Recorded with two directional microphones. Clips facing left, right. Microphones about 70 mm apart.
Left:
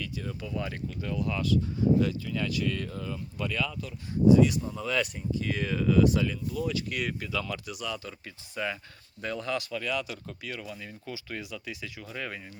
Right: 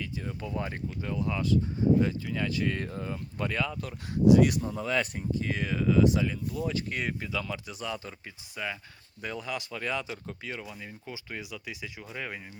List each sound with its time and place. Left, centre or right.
0.0 s speech: right
4.1 s speech: right
4.7 s speech: right
5.1 s speech: right
5.5 s speech: centre
6.6 s speech: right
8.5 s speech: centre